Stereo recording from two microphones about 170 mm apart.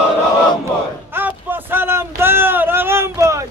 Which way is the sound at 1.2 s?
10° right (ahead or behind).